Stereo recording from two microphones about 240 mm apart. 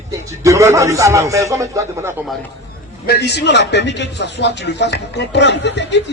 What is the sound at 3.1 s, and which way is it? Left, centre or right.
A man's voice, left.